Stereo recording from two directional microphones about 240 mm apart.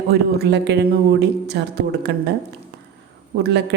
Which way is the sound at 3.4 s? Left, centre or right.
Right.